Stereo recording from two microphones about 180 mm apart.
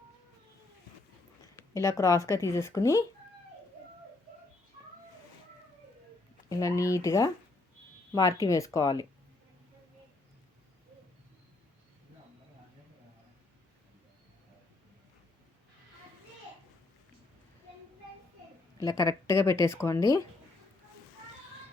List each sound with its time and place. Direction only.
1.5 s speech: 15° left (ahead or behind)
6.5 s speech: 15° left (ahead or behind)
18.9 s speech: 20° left (ahead or behind)